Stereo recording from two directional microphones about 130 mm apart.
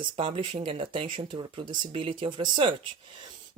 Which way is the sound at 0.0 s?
40° right (ahead or behind).